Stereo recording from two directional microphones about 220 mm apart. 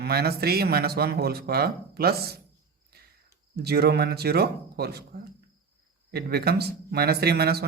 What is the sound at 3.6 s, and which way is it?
Speech, 45° right (ahead or behind).